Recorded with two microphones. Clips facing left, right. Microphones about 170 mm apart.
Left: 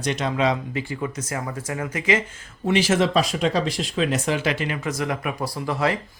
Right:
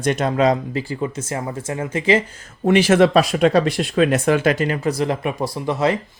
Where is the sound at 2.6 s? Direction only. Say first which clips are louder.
Right 6 dB; 60° right (ahead or behind).